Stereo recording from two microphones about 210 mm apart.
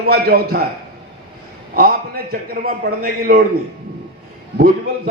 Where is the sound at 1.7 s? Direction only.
45° right (ahead or behind).